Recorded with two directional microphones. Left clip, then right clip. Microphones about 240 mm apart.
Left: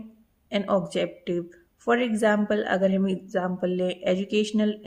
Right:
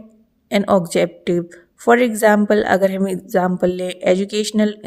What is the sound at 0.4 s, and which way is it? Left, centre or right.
Speech, right.